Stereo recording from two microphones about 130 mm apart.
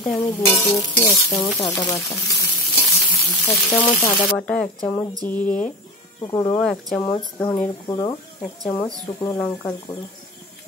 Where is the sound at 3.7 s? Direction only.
10° left (ahead or behind).